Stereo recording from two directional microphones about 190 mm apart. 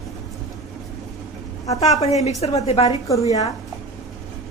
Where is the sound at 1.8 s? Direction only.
35° left (ahead or behind).